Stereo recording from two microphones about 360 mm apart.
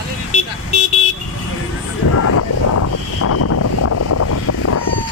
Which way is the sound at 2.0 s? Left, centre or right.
Left.